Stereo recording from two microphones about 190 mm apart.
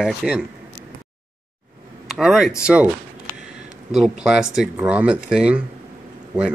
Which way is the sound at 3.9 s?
Centre (ahead or behind).